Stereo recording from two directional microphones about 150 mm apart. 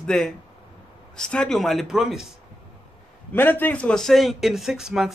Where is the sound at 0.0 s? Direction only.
5° left (ahead or behind).